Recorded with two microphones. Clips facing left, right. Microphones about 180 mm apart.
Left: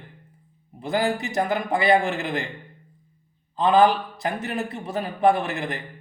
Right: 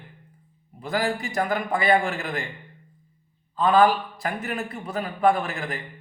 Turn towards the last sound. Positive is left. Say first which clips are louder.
# left 2 dB
turn(degrees=20)  # may be behind; listen again after turning